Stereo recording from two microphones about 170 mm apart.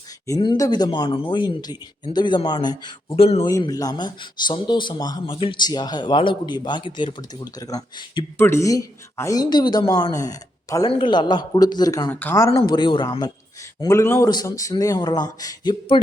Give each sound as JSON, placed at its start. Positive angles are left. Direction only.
{"t": 0.3, "sound": "speech", "side_deg": 25}
{"t": 3.4, "sound": "speech", "side_deg": 20}
{"t": 12.5, "sound": "speech", "side_deg": 25}